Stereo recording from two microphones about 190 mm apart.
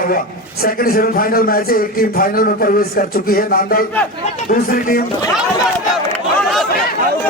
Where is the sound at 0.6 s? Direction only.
50° left (ahead or behind).